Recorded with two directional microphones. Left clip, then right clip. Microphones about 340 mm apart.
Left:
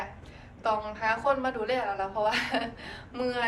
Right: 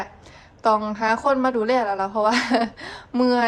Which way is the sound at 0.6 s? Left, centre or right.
Centre.